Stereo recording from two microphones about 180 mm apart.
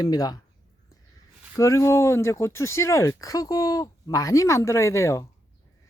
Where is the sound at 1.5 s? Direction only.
15° left (ahead or behind).